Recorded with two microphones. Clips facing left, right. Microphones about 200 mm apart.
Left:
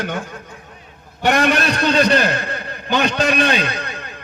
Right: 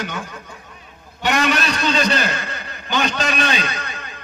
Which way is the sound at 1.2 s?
55° left (ahead or behind).